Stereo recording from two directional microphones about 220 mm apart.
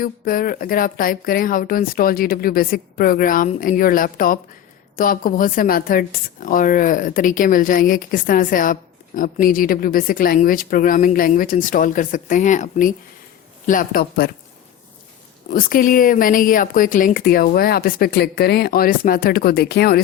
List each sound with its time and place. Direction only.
0.0 s speech: 40° left (ahead or behind)
15.4 s speech: 40° left (ahead or behind)